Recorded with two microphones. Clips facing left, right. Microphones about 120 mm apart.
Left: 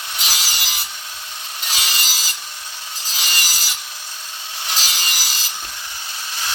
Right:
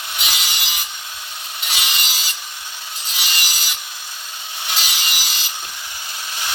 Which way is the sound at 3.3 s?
35° left (ahead or behind).